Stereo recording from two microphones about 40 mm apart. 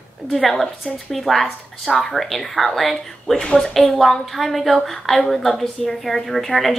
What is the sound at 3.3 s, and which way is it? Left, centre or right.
Speech, left.